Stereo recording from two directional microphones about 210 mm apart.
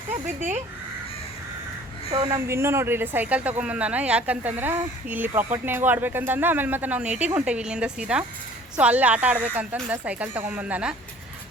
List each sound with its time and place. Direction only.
2.0 s a woman's voice: 25° right (ahead or behind)
2.5 s a woman's voice: 10° right (ahead or behind)